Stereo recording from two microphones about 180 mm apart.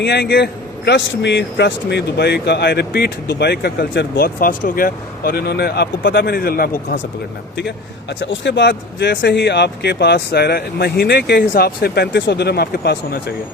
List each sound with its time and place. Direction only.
0.0 s a man's voice: 70° left (ahead or behind)
8.2 s a man's voice: 80° left